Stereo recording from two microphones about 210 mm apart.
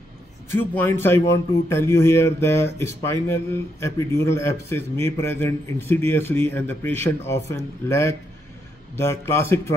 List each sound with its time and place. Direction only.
0.6 s a man's voice: 10° left (ahead or behind)